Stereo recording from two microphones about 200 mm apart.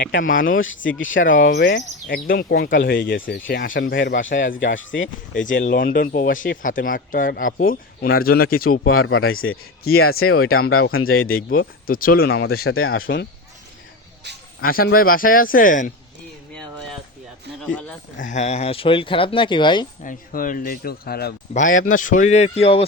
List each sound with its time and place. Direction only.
0.0 s speech: 45° left (ahead or behind)
0.9 s speech: 70° left (ahead or behind)
1.1 s speech: 45° left (ahead or behind)
3.7 s speech: 65° left (ahead or behind)
4.3 s speech: 40° left (ahead or behind)
4.6 s speech: 70° left (ahead or behind)
5.5 s speech: 45° left (ahead or behind)
8.9 s speech: 90° left
11.9 s speech: 45° left (ahead or behind)
12.6 s speech: 90° left
14.6 s speech: 45° left (ahead or behind)
18.2 s speech: 35° left (ahead or behind)
20.1 s speech: 45° left (ahead or behind)
21.5 s speech: 40° left (ahead or behind)